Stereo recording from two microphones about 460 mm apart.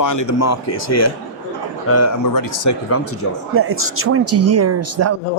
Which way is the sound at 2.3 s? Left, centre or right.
Left.